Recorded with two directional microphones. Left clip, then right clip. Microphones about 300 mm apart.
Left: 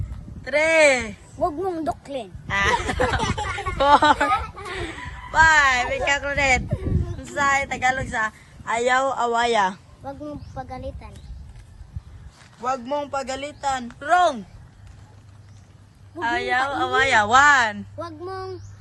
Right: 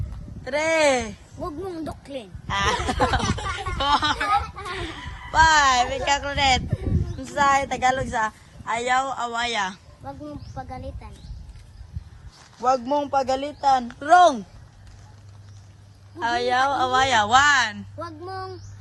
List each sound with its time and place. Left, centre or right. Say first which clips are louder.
0.4 s speech: left 4 dB; centre
7.3 s a woman's voice: right 1 dB; centre
12.4 s a sound: right 5 dB; centre
12.9 s speech: right 4 dB; centre
16.2 s speech: right 1 dB; centre